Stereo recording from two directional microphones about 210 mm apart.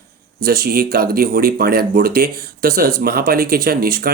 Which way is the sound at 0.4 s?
45° right (ahead or behind).